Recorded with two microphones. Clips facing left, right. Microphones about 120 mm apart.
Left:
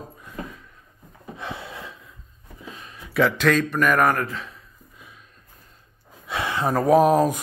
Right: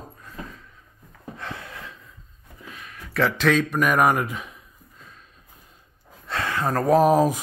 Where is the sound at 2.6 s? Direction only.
25° left (ahead or behind).